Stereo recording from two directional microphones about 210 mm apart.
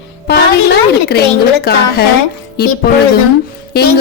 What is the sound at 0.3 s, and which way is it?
A woman's voice, 50° left (ahead or behind).